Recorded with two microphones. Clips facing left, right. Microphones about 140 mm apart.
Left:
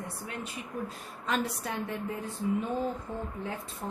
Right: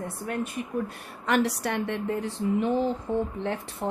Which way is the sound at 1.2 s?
75° right (ahead or behind).